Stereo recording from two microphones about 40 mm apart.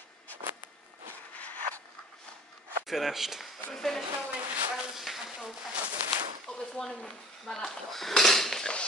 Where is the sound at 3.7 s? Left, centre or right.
Centre.